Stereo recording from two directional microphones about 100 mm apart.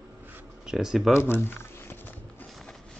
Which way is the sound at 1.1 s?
25° left (ahead or behind).